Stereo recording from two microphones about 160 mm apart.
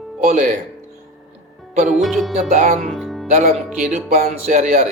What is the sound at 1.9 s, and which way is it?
Music, centre (ahead or behind).